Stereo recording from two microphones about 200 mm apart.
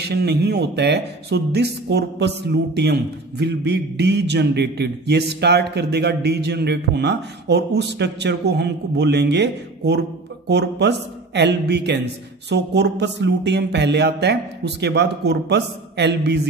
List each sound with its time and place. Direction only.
0.0 s speech: 55° right (ahead or behind)